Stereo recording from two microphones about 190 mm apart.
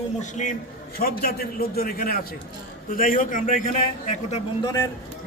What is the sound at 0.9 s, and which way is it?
A man's voice, 50° left (ahead or behind).